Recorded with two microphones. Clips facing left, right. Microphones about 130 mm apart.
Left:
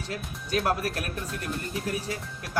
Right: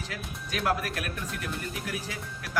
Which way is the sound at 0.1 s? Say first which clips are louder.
Left 9 dB; 30° left (ahead or behind).